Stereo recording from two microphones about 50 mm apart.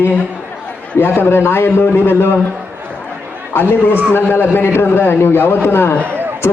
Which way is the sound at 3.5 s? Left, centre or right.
Left.